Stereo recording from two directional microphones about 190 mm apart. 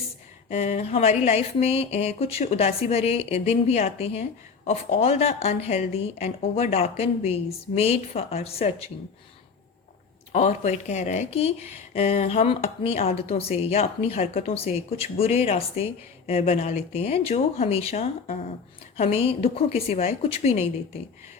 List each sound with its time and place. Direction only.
0.5 s speech: 35° left (ahead or behind)
10.3 s speech: 35° left (ahead or behind)